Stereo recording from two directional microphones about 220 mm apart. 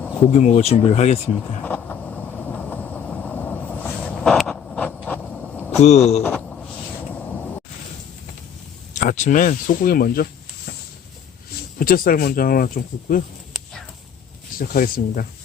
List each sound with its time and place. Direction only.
0.3 s speech: 30° left (ahead or behind)
1.4 s vehicle: 5° left (ahead or behind)
5.8 s speech: 30° left (ahead or behind)
6.2 s a sound: 5° left (ahead or behind)
9.0 s speech: 35° left (ahead or behind)
11.8 s speech: 40° left (ahead or behind)
14.6 s speech: 40° left (ahead or behind)